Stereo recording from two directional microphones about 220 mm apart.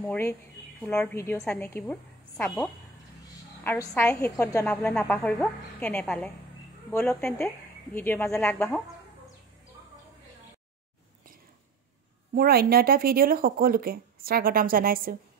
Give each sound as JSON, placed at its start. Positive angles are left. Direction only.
{"t": 0.0, "sound": "a woman's voice", "side_deg": 10}
{"t": 3.6, "sound": "a woman's voice", "side_deg": 10}
{"t": 12.4, "sound": "speech", "side_deg": -45}